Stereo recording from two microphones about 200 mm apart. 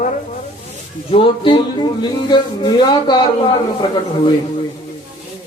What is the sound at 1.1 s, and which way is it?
Speech, 25° left (ahead or behind).